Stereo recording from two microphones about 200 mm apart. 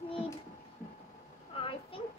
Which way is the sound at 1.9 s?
25° left (ahead or behind).